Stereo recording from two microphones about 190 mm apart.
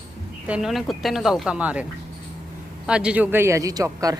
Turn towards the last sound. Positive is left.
turn(degrees=-20)  # may be behind; listen again after turning